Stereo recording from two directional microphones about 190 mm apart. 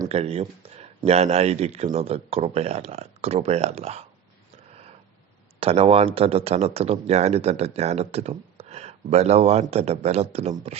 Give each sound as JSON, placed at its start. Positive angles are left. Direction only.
{"t": 0.1, "sound": "speech", "side_deg": -30}
{"t": 5.5, "sound": "speech", "side_deg": -30}